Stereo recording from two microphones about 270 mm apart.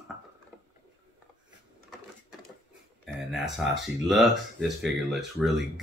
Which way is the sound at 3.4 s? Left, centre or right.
Right.